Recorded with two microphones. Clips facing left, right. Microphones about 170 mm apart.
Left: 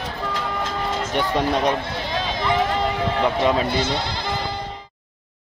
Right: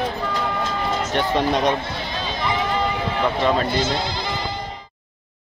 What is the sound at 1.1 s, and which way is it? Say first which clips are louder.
Speech: right 1 dB; 5° left (ahead or behind).